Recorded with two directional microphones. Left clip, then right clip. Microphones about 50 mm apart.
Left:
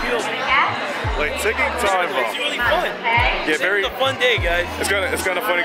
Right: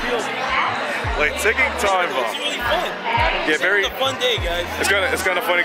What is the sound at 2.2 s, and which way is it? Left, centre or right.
A man's voice, left.